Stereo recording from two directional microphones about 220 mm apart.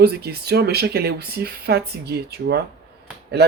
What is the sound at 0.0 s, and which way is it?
A man's voice, 45° right (ahead or behind).